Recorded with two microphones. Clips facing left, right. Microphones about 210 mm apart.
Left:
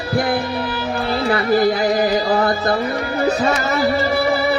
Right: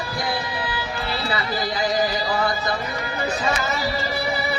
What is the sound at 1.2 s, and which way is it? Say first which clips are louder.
Music: left 12 dB; 55° left (ahead or behind).